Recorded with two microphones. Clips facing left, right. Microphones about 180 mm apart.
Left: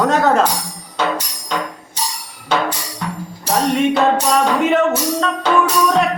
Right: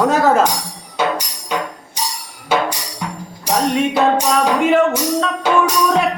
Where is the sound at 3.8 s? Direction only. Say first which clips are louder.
Left 1 dB; 5° right (ahead or behind).